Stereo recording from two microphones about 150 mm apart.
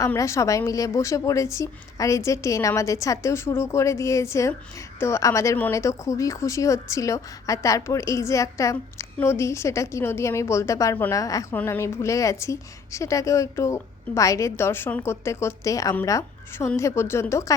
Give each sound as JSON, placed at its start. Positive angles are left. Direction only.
{"t": 0.0, "sound": "a woman's voice", "side_deg": 20}